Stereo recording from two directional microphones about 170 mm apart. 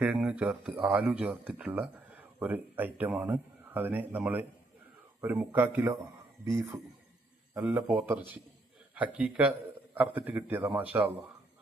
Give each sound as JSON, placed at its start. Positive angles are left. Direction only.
{"t": 0.0, "sound": "a man's voice", "side_deg": -10}